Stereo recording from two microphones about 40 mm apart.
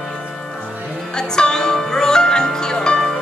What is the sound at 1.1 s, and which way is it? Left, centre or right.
Music, centre.